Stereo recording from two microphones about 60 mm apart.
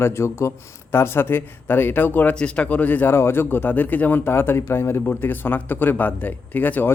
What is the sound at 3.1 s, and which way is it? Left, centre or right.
Speech, left.